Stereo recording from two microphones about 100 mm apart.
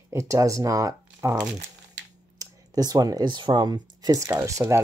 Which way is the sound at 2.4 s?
40° right (ahead or behind).